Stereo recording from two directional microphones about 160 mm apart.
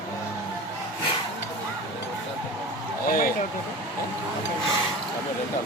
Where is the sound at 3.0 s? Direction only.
65° left (ahead or behind).